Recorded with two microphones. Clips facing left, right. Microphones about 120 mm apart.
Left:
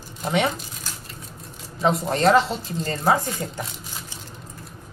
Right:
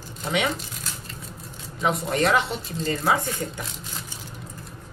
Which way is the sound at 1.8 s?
30° left (ahead or behind).